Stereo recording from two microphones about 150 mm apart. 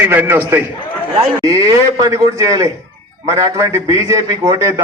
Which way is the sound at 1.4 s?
25° right (ahead or behind).